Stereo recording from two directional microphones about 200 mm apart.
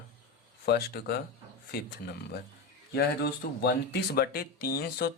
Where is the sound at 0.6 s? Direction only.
50° left (ahead or behind).